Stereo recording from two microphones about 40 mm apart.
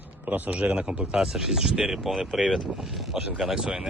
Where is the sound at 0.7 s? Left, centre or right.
Right.